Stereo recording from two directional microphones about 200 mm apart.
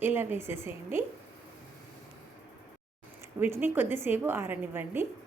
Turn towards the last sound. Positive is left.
turn(degrees=-10)  # may be behind; listen again after turning